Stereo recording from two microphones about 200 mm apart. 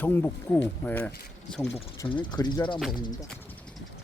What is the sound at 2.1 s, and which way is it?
Speech, 20° left (ahead or behind).